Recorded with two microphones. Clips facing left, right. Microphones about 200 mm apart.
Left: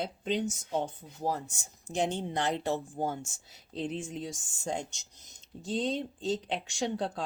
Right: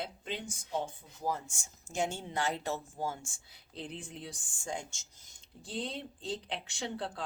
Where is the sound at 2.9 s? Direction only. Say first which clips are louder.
Left 4 dB; 60° left (ahead or behind).